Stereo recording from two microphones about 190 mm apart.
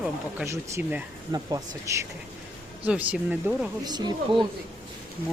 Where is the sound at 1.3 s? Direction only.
20° right (ahead or behind).